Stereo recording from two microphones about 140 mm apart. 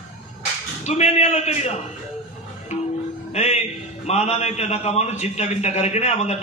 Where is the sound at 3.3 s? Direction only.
50° left (ahead or behind).